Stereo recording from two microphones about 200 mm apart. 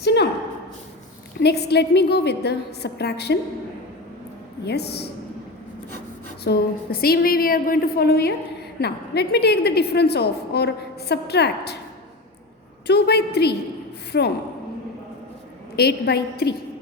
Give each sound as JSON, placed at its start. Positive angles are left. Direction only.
{"t": 0.0, "sound": "a sound", "side_deg": 55}
{"t": 1.4, "sound": "a woman's voice", "side_deg": 55}
{"t": 4.6, "sound": "a woman's voice", "side_deg": 55}
{"t": 6.4, "sound": "a woman's voice", "side_deg": 50}
{"t": 12.9, "sound": "a woman's voice", "side_deg": 55}
{"t": 15.7, "sound": "a woman's voice", "side_deg": 55}